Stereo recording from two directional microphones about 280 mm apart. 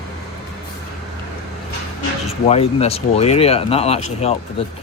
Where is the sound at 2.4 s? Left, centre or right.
Left.